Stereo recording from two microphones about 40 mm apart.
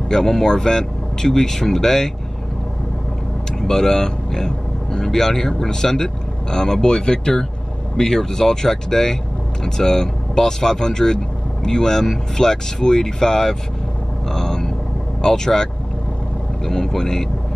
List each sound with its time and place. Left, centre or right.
0.1 s speech: centre
3.6 s speech: centre
14.3 s vehicle: centre
15.2 s speech: centre